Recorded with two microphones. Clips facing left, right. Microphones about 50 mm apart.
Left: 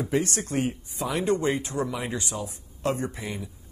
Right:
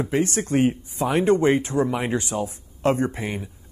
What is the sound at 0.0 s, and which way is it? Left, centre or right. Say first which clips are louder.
A man's voice: right 4 dB; right.